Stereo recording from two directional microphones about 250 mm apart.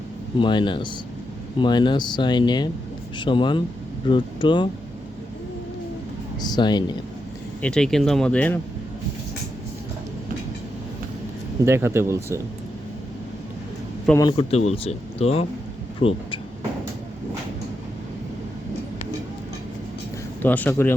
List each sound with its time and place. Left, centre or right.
0.3 s speech: centre
6.4 s speech: centre
7.6 s speech: centre
11.6 s speech: centre
14.1 s speech: centre
20.4 s speech: centre